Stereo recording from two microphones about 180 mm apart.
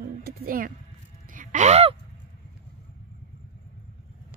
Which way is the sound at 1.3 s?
45° right (ahead or behind).